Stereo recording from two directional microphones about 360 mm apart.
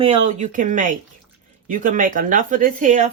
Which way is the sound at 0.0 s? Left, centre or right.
Centre.